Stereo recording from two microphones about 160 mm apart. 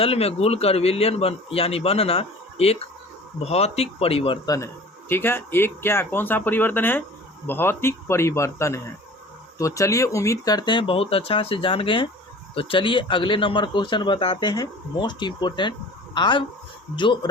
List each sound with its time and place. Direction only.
0.0 s a man's voice: 40° left (ahead or behind)
4.4 s a man's voice: 20° left (ahead or behind)